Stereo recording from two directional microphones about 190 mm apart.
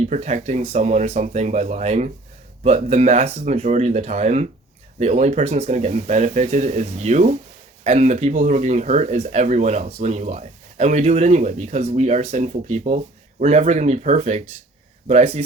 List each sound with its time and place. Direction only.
0.0 s speech: 35° right (ahead or behind)